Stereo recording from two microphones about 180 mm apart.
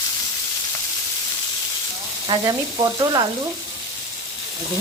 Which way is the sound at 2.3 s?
20° right (ahead or behind).